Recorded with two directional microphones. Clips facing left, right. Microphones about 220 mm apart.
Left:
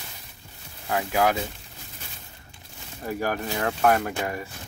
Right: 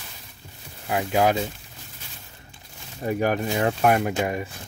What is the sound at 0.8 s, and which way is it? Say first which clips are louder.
Speech: right 2 dB; 20° right (ahead or behind).